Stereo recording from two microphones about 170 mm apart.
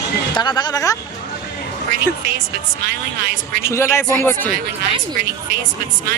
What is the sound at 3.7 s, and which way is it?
Speech, 15° left (ahead or behind).